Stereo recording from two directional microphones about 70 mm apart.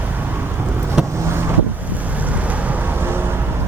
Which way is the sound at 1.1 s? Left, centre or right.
Right.